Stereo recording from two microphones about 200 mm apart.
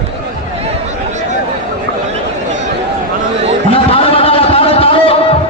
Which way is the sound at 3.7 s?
25° left (ahead or behind).